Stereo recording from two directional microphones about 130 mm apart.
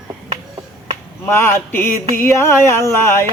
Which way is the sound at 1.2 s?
20° left (ahead or behind).